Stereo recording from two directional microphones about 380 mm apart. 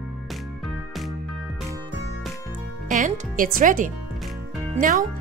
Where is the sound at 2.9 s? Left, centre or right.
Centre.